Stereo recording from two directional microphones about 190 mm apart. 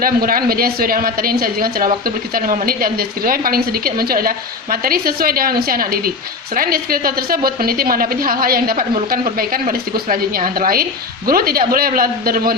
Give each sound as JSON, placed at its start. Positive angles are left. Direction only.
{"t": 0.0, "sound": "a woman's voice", "side_deg": -50}